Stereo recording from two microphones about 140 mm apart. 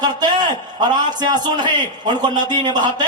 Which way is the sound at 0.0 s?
30° right (ahead or behind).